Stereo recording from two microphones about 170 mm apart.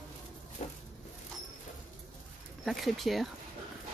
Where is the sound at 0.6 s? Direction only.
40° left (ahead or behind).